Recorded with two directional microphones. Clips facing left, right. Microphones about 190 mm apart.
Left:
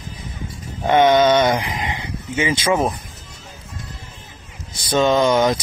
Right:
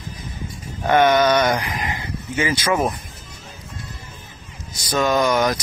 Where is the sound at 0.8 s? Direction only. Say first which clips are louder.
Left 2 dB; 25° left (ahead or behind).